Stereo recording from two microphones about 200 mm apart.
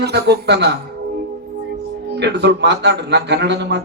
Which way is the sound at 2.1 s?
55° right (ahead or behind).